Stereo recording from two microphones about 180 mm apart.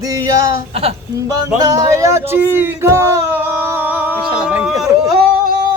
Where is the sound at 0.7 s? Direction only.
35° right (ahead or behind).